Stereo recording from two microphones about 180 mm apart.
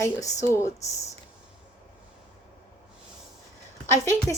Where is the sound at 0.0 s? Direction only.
20° left (ahead or behind).